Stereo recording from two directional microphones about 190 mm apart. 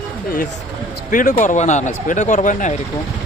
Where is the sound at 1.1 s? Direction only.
45° left (ahead or behind).